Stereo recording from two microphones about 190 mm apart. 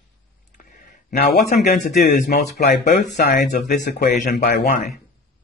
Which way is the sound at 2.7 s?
55° left (ahead or behind).